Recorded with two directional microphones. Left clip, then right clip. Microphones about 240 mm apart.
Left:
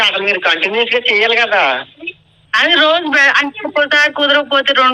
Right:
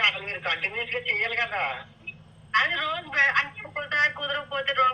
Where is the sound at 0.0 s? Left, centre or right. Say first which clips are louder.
Left 12 dB; left.